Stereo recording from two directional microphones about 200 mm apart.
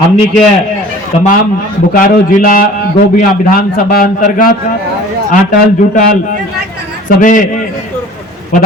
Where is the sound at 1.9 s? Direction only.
45° left (ahead or behind).